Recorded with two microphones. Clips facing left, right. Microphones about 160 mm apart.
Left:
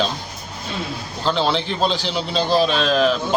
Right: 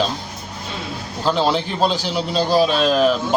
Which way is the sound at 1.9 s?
45° right (ahead or behind).